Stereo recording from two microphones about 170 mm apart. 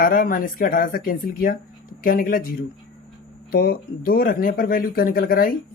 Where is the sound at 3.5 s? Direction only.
60° left (ahead or behind).